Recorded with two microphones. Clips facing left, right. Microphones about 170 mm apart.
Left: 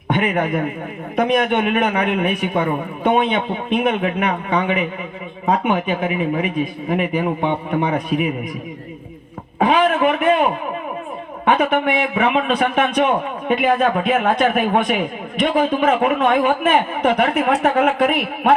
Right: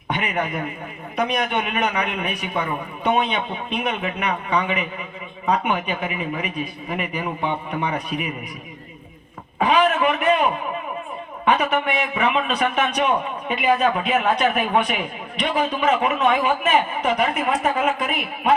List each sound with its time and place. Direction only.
0.1 s a man's voice: 50° left (ahead or behind)
9.6 s a man's voice: 50° left (ahead or behind)